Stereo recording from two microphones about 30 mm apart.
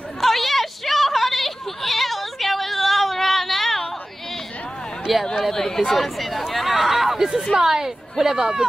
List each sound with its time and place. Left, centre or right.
0.2 s a sound: centre
5.1 s speech: centre
5.5 s speech: centre
5.9 s speech: centre
6.5 s hubbub: centre
7.5 s a woman's voice: centre